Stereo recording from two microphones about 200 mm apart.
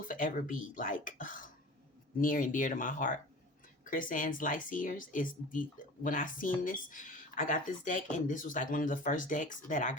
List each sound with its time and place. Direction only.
0.1 s speech: 40° left (ahead or behind)